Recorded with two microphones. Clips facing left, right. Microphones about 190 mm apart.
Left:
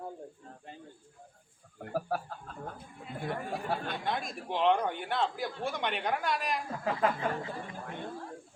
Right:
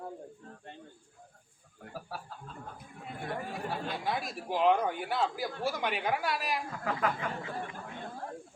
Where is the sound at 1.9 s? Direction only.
55° left (ahead or behind).